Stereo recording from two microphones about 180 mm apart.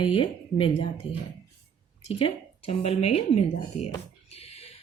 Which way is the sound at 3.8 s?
35° left (ahead or behind).